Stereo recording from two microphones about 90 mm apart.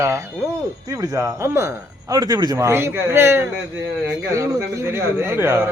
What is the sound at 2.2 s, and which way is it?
Speech, 45° right (ahead or behind).